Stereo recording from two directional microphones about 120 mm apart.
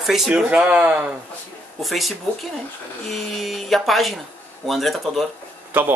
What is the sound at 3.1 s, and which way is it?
Speech, centre (ahead or behind).